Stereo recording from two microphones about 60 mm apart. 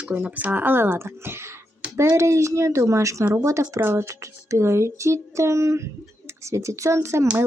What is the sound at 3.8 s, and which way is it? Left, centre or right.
Speech, right.